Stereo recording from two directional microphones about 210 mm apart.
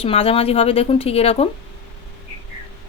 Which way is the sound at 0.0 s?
25° left (ahead or behind).